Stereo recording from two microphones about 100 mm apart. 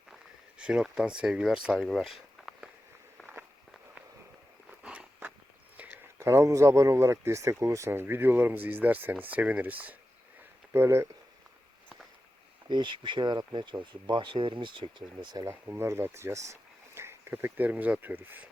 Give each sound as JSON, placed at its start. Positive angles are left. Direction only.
{"t": 0.6, "sound": "speech", "side_deg": -10}
{"t": 4.8, "sound": "walk", "side_deg": -15}
{"t": 5.7, "sound": "a sound", "side_deg": -15}
{"t": 6.1, "sound": "speech", "side_deg": -25}
{"t": 10.7, "sound": "speech", "side_deg": -25}
{"t": 12.6, "sound": "speech", "side_deg": -50}
{"t": 15.4, "sound": "speech", "side_deg": -25}